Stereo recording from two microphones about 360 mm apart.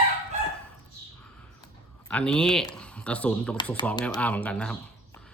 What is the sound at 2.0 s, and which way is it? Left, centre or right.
Speech, centre.